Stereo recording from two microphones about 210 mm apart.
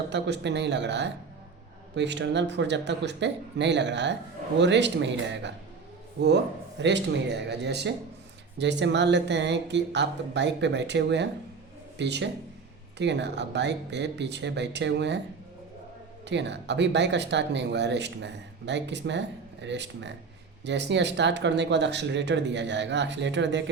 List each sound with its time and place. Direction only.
0.1 s speech: 55° right (ahead or behind)
16.3 s speech: 55° right (ahead or behind)